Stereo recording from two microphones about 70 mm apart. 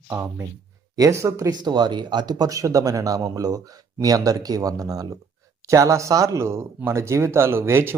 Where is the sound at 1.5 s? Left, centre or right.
Right.